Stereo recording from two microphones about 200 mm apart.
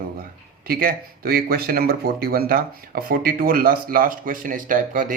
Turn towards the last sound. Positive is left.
turn(degrees=-45)  # may be behind; listen again after turning